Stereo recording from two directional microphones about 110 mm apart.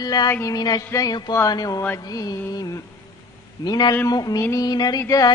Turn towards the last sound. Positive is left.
turn(degrees=35)  # may be behind; listen again after turning